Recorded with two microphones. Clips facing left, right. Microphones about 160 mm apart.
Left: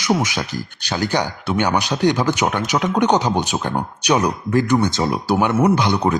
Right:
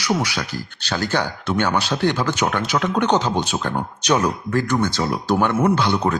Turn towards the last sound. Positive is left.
turn(degrees=15)  # may be behind; listen again after turning